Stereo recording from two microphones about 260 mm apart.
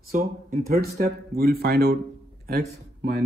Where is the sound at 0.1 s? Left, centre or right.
Right.